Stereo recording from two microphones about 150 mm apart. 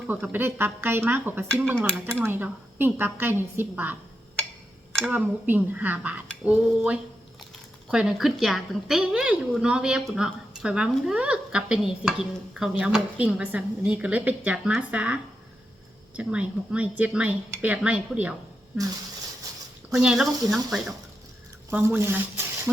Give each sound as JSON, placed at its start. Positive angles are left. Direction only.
{"t": 0.1, "sound": "speech", "side_deg": -15}
{"t": 5.1, "sound": "a woman's voice", "side_deg": -10}
{"t": 20.0, "sound": "a woman's voice", "side_deg": -5}
{"t": 21.7, "sound": "speech", "side_deg": -15}